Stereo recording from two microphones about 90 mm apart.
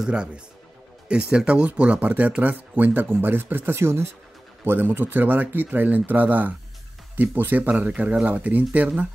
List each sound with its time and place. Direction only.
0.0 s speech: 10° right (ahead or behind)